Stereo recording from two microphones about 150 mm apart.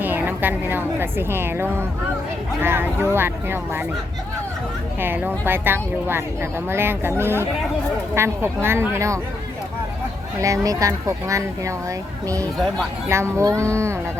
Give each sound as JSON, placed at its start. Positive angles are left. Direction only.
{"t": 0.0, "sound": "a woman's voice", "side_deg": -10}
{"t": 4.9, "sound": "speech", "side_deg": -15}
{"t": 10.4, "sound": "speech", "side_deg": -20}
{"t": 12.5, "sound": "speech", "side_deg": 0}
{"t": 13.1, "sound": "speech", "side_deg": -20}